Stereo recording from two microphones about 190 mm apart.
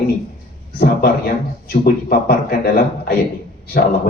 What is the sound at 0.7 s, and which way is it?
Speech, 55° left (ahead or behind).